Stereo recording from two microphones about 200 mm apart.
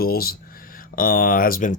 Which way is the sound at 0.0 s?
50° left (ahead or behind).